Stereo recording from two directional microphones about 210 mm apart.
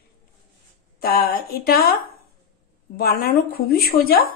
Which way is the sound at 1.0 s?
45° left (ahead or behind).